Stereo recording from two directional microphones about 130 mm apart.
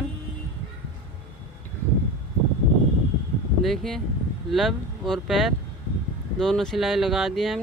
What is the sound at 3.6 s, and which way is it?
Speech, centre (ahead or behind).